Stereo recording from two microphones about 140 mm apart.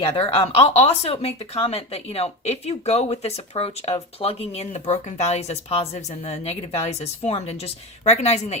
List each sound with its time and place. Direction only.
0.0 s speech: 40° left (ahead or behind)